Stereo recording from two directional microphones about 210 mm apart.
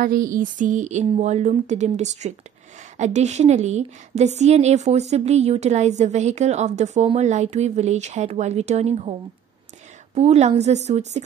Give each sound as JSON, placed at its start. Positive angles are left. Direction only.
{"t": 0.0, "sound": "a woman's voice", "side_deg": -40}
{"t": 10.1, "sound": "a woman's voice", "side_deg": -30}